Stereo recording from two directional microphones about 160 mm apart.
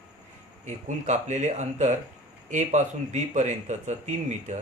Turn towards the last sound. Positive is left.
turn(degrees=-45)  # may be behind; listen again after turning